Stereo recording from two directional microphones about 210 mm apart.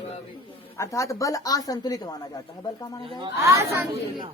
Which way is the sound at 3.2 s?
15° right (ahead or behind).